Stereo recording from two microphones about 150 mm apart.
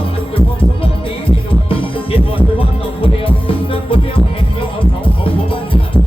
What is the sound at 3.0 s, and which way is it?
Music, 35° left (ahead or behind).